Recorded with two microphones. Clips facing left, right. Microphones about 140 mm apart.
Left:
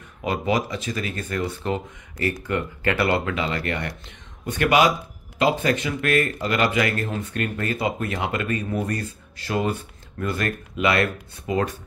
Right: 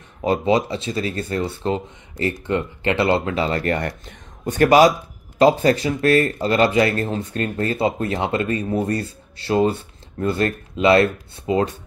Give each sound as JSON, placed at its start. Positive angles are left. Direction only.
{"t": 0.2, "sound": "speech", "side_deg": -30}